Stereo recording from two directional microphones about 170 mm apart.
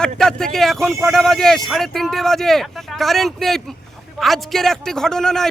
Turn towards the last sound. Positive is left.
turn(degrees=5)  # may be behind; listen again after turning